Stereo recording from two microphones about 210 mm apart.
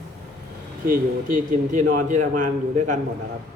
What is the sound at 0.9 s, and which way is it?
A man's voice, 40° right (ahead or behind).